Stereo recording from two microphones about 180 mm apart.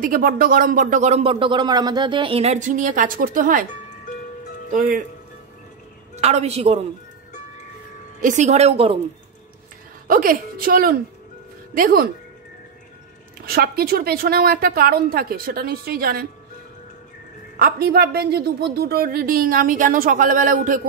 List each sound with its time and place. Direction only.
0.0 s speech: 50° right (ahead or behind)
4.6 s speech: 45° right (ahead or behind)
6.2 s a woman's voice: 35° right (ahead or behind)
8.2 s a woman's voice: 45° right (ahead or behind)
10.0 s speech: 50° right (ahead or behind)
13.5 s a woman's voice: 60° right (ahead or behind)
17.6 s speech: 55° right (ahead or behind)